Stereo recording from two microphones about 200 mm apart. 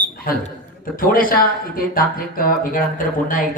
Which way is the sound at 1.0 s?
45° left (ahead or behind).